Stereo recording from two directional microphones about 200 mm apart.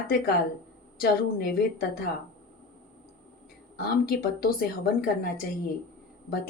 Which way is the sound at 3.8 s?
50° left (ahead or behind).